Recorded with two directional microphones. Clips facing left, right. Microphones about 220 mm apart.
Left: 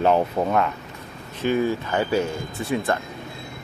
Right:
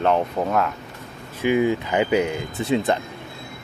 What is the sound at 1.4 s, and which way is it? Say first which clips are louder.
Speech: right 2 dB; 15° right (ahead or behind).